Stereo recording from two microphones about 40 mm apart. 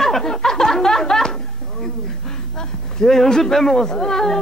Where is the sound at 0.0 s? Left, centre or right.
Centre.